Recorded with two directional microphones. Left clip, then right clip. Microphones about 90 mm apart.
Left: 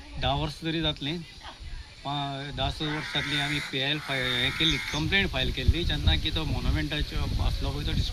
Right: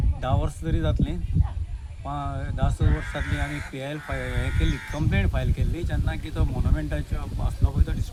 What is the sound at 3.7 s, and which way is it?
Speech, 30° right (ahead or behind).